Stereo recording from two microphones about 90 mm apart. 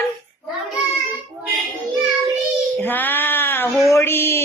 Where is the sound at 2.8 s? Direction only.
20° left (ahead or behind).